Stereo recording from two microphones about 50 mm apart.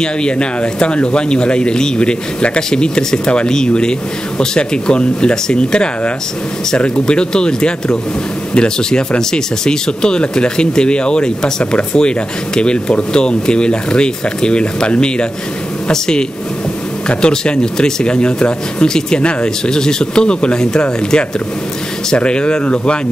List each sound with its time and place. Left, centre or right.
0.0 s speech: centre